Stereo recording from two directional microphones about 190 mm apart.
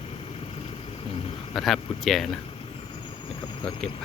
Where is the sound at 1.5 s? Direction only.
Centre (ahead or behind).